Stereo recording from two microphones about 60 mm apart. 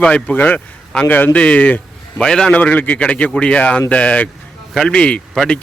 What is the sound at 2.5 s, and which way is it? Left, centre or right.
A man's voice, left.